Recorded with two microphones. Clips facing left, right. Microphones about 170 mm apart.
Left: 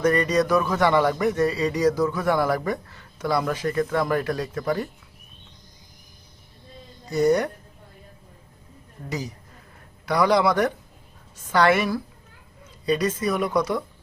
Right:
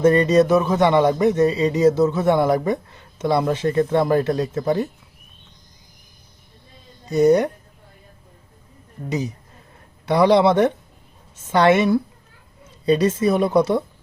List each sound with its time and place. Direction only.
0.0 s speech: 25° right (ahead or behind)
7.1 s speech: 20° right (ahead or behind)
9.0 s speech: 20° right (ahead or behind)